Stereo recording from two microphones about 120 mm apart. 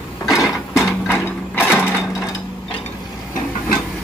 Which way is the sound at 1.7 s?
20° left (ahead or behind).